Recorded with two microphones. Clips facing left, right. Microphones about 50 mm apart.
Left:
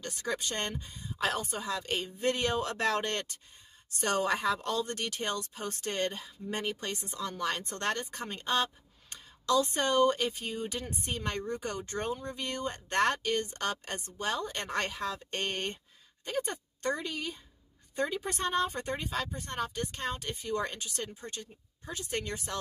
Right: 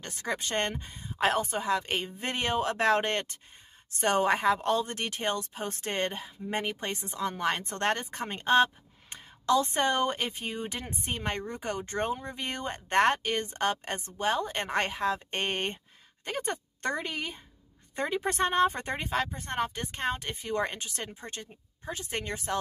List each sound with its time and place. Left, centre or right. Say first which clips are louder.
0.0 s a woman's voice: right 1 dB; right
16.3 s a woman's voice: right 1 dB; right